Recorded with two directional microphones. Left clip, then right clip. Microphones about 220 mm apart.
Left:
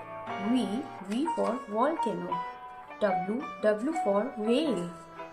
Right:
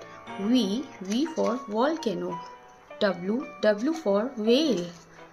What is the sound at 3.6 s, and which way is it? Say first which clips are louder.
Speech: right 2 dB; 45° right (ahead or behind).